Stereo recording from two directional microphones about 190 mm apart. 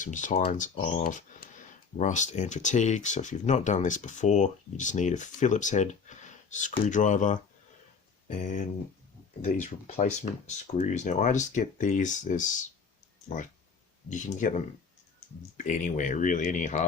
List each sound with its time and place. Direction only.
0.0 s speech: 40° left (ahead or behind)